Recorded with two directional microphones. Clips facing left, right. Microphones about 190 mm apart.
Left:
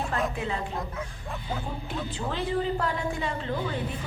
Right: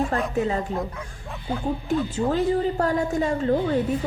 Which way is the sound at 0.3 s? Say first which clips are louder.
Right 8 dB; 40° right (ahead or behind).